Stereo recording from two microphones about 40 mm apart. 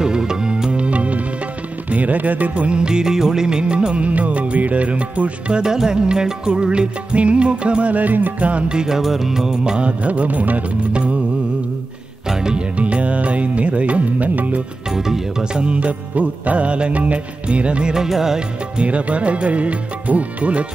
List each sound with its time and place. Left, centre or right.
0.0 s music: centre
5.6 s music: centre; by 8.6 s right
8.6 s speech: centre
9.8 s music: right
10.9 s music: right
12.3 s music: centre
12.7 s music: right
14.9 s speech: centre
15.7 s music: right
17.9 s speech: centre
18.8 s music: right